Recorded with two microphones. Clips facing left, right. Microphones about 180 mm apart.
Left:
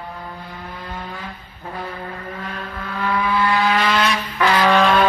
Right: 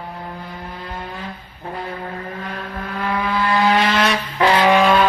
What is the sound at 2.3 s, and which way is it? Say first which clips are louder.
Vehicle: right 1 dB; 45° right (ahead or behind).